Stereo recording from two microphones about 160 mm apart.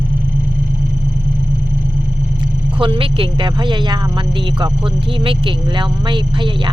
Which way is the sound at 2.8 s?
35° right (ahead or behind).